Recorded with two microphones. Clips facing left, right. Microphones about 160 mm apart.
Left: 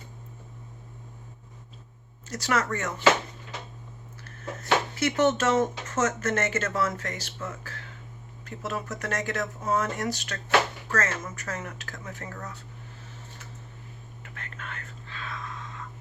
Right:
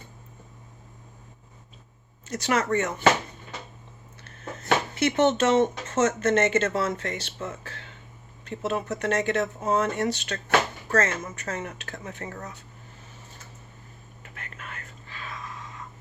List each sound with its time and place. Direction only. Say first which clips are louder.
2.3 s speech: right 3 dB; 20° right (ahead or behind)
4.2 s speech: left 1 dB; 20° right (ahead or behind)
14.3 s whispering: left 1 dB; 10° right (ahead or behind)
15.1 s a sound: left 1 dB; 10° right (ahead or behind)